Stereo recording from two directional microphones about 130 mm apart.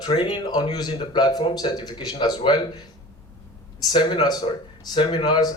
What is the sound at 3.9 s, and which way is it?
Speech, 35° left (ahead or behind).